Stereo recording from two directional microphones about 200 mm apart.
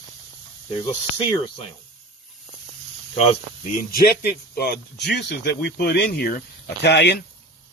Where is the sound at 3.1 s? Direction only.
30° left (ahead or behind).